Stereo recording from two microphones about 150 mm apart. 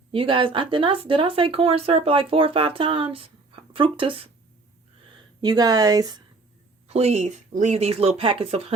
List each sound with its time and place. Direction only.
0.1 s speech: 35° right (ahead or behind)
5.4 s speech: 25° right (ahead or behind)
6.8 s speech: 45° right (ahead or behind)